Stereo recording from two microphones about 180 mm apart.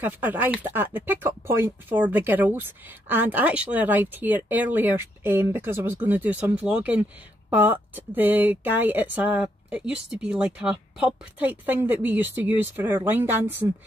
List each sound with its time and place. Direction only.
0.0 s speech: 10° right (ahead or behind)